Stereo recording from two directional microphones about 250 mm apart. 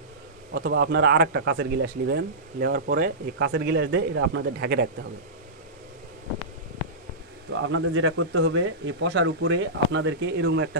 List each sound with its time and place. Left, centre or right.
0.6 s speech: right
7.5 s speech: right